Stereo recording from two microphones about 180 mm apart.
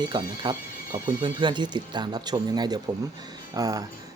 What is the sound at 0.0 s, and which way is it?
Speech, 25° right (ahead or behind).